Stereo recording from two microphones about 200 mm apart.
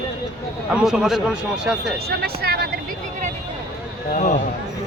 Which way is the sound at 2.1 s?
50° right (ahead or behind).